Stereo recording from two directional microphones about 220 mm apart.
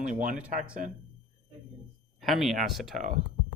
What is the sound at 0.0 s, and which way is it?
Speech, 35° right (ahead or behind).